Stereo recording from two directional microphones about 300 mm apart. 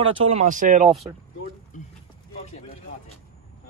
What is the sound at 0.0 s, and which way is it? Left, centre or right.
Speech, right.